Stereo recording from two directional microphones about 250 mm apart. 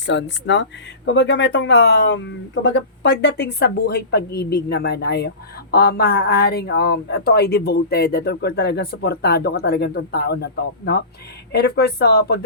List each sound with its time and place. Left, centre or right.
0.0 s speech: left